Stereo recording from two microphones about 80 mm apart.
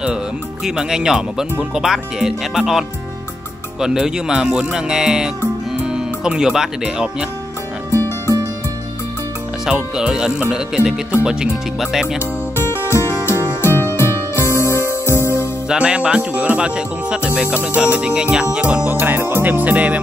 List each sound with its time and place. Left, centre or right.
0.7 s speech: centre
3.8 s speech: centre
7.9 s music: left
9.7 s speech: centre
12.5 s music: left
15.7 s speech: centre
17.6 s music: centre